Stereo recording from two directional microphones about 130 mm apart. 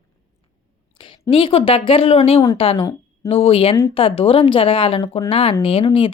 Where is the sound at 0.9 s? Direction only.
40° left (ahead or behind).